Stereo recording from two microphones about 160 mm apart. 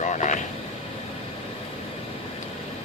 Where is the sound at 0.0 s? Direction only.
50° left (ahead or behind).